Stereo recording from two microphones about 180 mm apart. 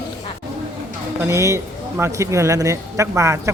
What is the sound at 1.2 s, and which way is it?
A man's voice, 15° right (ahead or behind).